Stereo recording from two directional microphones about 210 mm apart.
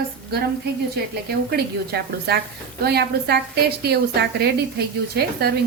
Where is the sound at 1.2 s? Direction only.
50° right (ahead or behind).